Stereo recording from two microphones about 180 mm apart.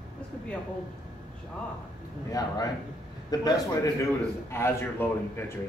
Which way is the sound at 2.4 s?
20° left (ahead or behind).